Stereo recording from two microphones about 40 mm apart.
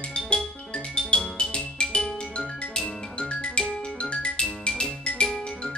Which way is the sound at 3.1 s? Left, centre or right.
Left.